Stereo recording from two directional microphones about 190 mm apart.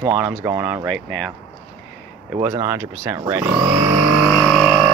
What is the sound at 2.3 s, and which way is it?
Speech, 15° right (ahead or behind).